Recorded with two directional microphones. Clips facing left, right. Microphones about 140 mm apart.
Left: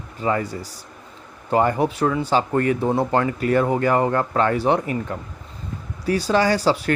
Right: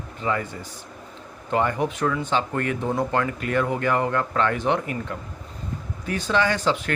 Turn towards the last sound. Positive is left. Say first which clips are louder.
# left 4 dB
turn(degrees=35)  # may be behind; listen again after turning